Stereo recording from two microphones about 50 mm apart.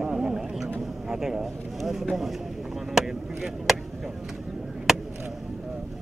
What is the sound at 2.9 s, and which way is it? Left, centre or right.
Speech, centre.